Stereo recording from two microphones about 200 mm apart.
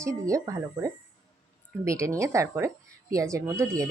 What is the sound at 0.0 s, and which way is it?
Speech, 15° right (ahead or behind).